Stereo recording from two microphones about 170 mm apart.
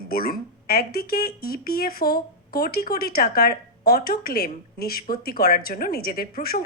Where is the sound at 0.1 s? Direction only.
60° left (ahead or behind).